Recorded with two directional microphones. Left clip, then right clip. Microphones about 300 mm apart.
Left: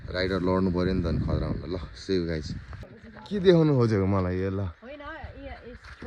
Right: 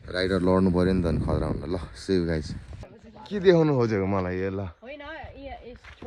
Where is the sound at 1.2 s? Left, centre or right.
Right.